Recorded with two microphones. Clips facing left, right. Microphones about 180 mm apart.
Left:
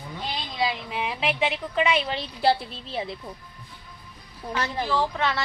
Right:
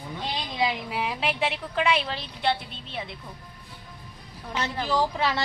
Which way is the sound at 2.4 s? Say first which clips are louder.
Left 5 dB; 35° left (ahead or behind).